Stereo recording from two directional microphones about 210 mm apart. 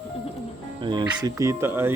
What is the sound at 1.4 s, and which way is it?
Mantra, 15° right (ahead or behind).